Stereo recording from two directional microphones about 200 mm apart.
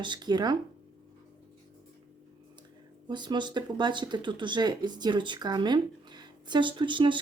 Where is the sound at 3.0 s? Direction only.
20° right (ahead or behind).